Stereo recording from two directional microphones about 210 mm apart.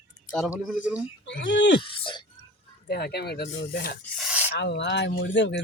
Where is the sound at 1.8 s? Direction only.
25° left (ahead or behind).